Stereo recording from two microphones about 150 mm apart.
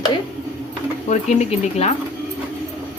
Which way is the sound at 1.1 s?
50° left (ahead or behind).